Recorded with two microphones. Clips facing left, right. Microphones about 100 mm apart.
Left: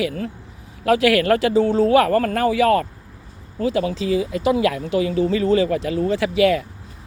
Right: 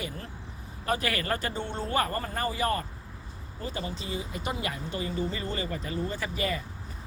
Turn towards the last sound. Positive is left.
turn(degrees=85)